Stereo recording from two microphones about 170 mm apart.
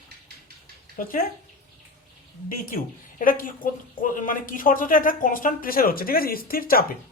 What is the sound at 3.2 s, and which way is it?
A woman's voice, 55° left (ahead or behind).